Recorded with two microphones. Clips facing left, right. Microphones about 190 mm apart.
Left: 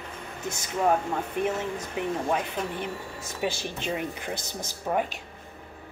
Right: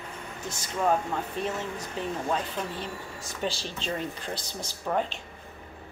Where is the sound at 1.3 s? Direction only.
15° left (ahead or behind).